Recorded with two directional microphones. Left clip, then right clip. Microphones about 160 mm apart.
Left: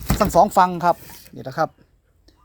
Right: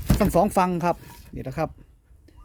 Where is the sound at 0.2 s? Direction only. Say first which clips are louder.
Left 6 dB; 20° right (ahead or behind).